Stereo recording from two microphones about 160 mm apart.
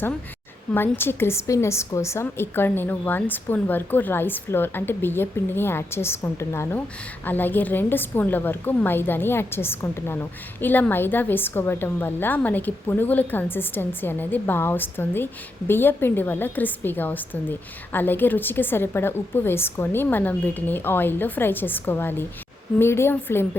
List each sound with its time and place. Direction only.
0.7 s a woman's voice: 15° left (ahead or behind)